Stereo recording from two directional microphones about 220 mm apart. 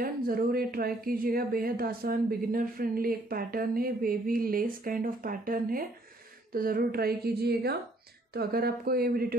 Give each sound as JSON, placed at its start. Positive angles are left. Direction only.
{"t": 0.0, "sound": "a woman's voice", "side_deg": -40}